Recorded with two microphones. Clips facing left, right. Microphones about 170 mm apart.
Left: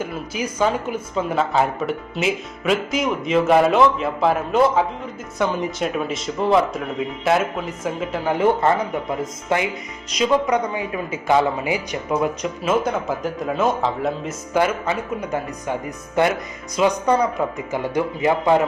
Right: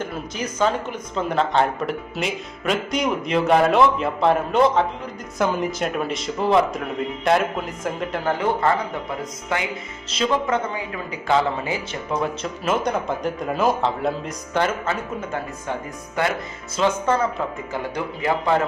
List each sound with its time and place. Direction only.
0.0 s speech: 10° left (ahead or behind)
8.3 s speech: 20° left (ahead or behind)
10.2 s speech: 15° left (ahead or behind)
16.7 s speech: 15° left (ahead or behind)